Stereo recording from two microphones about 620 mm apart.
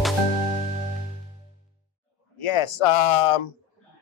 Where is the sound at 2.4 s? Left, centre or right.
Left.